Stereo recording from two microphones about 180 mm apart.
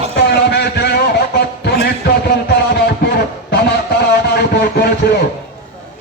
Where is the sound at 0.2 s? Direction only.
65° left (ahead or behind).